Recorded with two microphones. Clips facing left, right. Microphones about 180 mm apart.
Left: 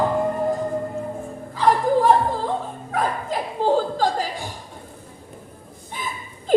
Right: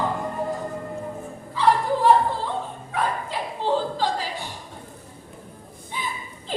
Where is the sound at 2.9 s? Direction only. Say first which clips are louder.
Left 3 dB; 45° left (ahead or behind).